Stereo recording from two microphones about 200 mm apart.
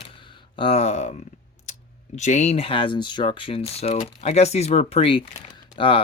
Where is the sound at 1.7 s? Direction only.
35° left (ahead or behind).